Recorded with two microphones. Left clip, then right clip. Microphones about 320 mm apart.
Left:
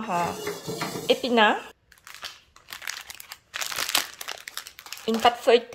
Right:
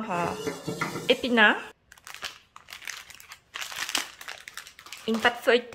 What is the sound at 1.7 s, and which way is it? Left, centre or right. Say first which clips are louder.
Crunch: right 1 dB; centre.